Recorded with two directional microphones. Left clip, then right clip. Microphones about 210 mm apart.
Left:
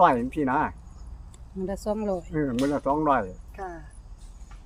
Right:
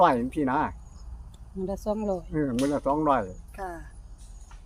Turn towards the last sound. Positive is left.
turn(degrees=-55)  # may be behind; listen again after turning